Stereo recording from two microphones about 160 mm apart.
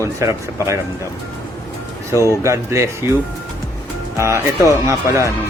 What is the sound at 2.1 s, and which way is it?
Speech, 20° right (ahead or behind).